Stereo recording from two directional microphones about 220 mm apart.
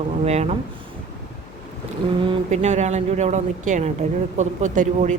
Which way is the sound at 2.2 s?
25° right (ahead or behind).